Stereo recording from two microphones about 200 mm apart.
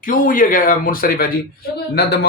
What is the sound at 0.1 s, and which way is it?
A man's voice, 45° left (ahead or behind).